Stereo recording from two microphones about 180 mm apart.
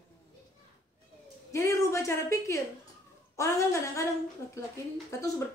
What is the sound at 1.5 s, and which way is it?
A woman's voice, 15° left (ahead or behind).